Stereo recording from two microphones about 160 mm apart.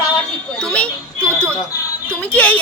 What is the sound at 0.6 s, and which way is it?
A child's voice, 5° left (ahead or behind).